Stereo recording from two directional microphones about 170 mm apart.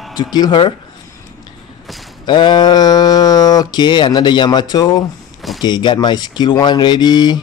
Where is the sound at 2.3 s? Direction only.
25° left (ahead or behind).